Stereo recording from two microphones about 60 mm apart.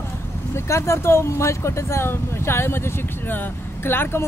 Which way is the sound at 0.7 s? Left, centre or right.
Left.